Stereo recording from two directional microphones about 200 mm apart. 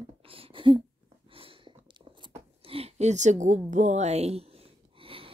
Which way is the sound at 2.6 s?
30° right (ahead or behind).